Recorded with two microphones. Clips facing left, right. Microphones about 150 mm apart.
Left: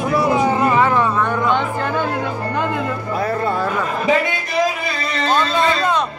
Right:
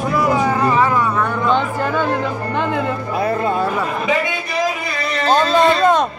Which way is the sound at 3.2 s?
20° right (ahead or behind).